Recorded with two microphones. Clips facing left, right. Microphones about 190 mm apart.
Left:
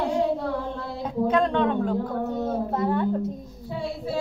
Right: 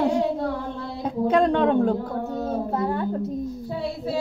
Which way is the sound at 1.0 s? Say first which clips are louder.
Right 3 dB; 35° right (ahead or behind).